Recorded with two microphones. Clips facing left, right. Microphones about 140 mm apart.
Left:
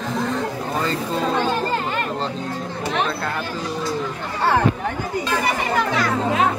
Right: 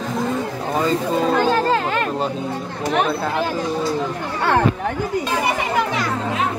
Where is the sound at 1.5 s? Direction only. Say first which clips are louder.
Right 4 dB; 90° right.